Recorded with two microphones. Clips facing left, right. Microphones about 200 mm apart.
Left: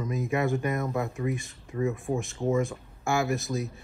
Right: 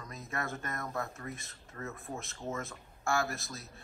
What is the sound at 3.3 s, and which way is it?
Speech, centre (ahead or behind).